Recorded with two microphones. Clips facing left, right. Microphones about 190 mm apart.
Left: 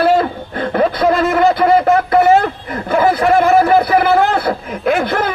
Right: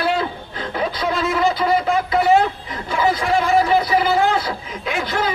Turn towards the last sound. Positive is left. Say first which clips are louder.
# left 7 dB
turn(degrees=60)  # may be behind; listen again after turning